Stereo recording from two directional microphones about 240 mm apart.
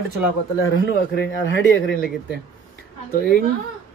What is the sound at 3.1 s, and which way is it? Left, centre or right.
Speech, left.